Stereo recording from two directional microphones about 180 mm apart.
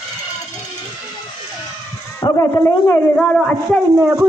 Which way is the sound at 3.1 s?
5° left (ahead or behind).